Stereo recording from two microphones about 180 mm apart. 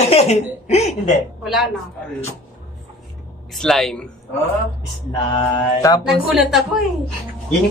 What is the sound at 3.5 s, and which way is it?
Speech, centre (ahead or behind).